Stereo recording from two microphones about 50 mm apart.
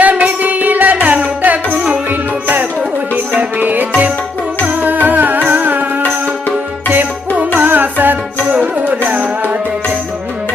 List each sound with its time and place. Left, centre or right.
0.0 s music: right
7.3 s carnatic music: right
8.6 s music: right